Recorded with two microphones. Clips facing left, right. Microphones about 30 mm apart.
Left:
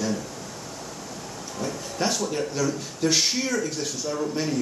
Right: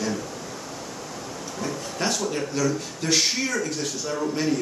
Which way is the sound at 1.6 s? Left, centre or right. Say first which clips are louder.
Left 1 dB; centre.